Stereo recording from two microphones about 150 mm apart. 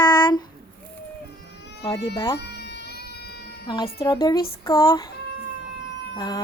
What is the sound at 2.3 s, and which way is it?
Baby cry, 90° left.